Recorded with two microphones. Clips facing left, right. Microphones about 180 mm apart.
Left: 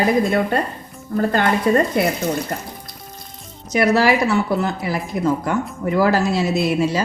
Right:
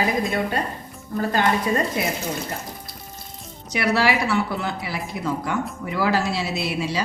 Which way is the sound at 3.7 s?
45° left (ahead or behind).